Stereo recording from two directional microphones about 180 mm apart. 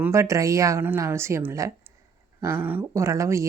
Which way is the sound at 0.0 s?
15° right (ahead or behind).